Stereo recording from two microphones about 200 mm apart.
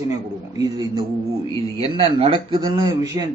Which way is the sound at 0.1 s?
20° right (ahead or behind).